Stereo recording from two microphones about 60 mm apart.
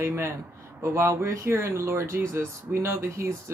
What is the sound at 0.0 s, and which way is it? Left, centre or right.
Speech, right.